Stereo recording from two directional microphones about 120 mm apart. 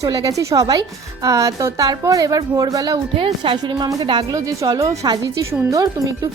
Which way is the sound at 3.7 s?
30° right (ahead or behind).